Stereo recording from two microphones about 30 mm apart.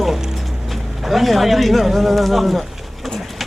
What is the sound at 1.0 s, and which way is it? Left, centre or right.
Speech, centre.